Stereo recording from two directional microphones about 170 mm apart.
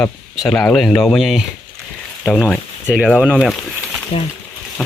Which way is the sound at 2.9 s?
5° right (ahead or behind).